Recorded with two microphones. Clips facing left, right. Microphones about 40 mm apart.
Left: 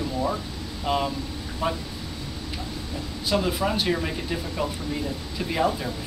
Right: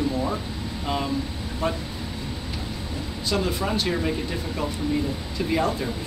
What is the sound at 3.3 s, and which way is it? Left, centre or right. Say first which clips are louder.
Speech: left 1 dB; centre.